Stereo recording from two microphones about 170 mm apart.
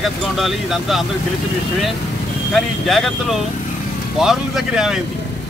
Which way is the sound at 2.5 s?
Centre (ahead or behind).